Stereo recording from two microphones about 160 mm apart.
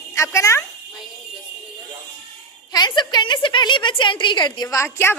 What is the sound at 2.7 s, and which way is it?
A woman's voice, 25° left (ahead or behind).